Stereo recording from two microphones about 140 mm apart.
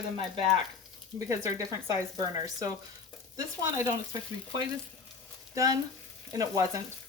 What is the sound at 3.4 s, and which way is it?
Speech, 20° right (ahead or behind).